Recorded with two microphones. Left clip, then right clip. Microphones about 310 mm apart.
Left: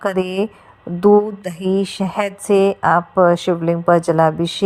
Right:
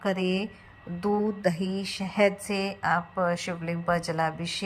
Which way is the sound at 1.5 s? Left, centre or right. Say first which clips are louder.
Left 13 dB; left.